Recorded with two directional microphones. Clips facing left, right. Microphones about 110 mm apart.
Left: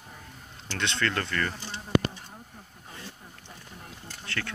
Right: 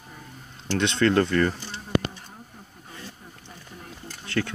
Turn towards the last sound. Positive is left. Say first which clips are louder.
# right 8 dB
turn(degrees=-20)  # may be behind; listen again after turning